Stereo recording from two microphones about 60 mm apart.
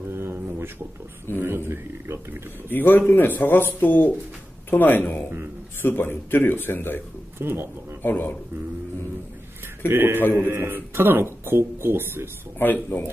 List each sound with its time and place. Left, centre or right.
0.1 s a sound: right
1.4 s speech: right
2.7 s a man's voice: left
7.3 s speech: right
8.0 s a man's voice: left
9.8 s speech: right
12.5 s a man's voice: left